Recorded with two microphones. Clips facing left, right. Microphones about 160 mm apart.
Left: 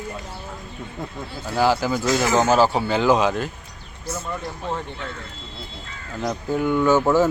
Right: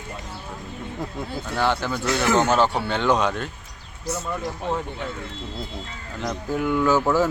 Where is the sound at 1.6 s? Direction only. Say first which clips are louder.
Left 4 dB; 5° left (ahead or behind).